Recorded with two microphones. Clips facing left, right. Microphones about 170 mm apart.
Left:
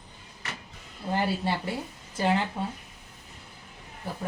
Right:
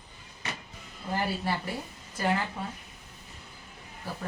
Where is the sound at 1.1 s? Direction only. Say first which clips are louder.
Left 3 dB; 25° left (ahead or behind).